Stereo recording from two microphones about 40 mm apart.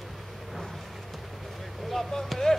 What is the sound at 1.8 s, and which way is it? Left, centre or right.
Basketball bounce, centre.